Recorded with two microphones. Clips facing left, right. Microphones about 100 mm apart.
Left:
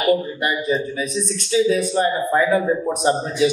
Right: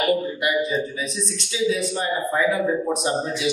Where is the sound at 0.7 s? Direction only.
45° left (ahead or behind).